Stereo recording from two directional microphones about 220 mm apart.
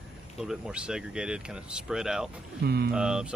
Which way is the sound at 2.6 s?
45° right (ahead or behind).